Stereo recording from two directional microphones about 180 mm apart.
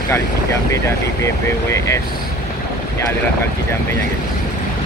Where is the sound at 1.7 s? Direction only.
15° left (ahead or behind).